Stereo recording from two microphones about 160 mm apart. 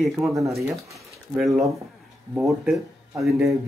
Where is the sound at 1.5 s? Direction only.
20° right (ahead or behind).